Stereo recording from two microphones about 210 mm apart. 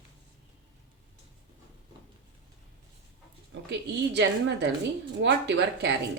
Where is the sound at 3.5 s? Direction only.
55° right (ahead or behind).